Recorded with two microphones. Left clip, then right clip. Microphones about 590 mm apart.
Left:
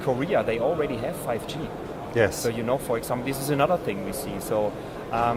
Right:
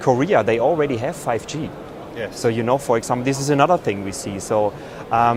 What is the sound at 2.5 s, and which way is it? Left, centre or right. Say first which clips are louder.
Speech: right 7 dB; right.